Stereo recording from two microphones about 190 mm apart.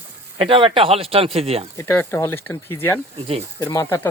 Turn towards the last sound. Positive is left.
turn(degrees=15)  # may be behind; listen again after turning